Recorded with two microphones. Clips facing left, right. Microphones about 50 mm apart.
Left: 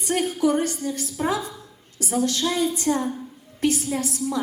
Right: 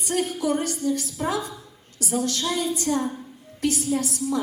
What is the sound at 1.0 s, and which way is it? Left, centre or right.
A woman's voice, left.